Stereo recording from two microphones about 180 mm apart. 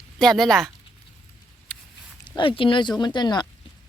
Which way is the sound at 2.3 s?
25° left (ahead or behind).